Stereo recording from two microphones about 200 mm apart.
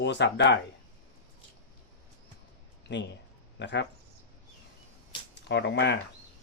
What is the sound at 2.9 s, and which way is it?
Speech, 60° left (ahead or behind).